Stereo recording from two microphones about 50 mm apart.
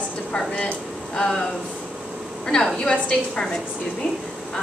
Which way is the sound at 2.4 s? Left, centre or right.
Centre.